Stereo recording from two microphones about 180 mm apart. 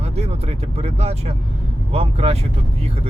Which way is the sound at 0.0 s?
35° right (ahead or behind).